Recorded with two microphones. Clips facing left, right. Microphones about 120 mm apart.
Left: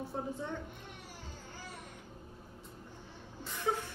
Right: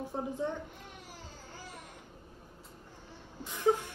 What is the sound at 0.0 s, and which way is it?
Speech, 15° right (ahead or behind).